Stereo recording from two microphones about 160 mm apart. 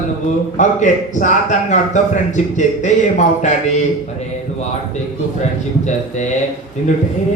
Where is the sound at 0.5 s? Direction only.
50° left (ahead or behind).